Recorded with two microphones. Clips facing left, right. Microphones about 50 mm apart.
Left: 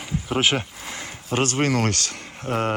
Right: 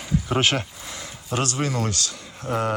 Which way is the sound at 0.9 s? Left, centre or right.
Left.